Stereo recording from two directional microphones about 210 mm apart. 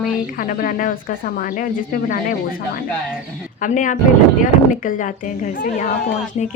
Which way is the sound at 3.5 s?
40° left (ahead or behind).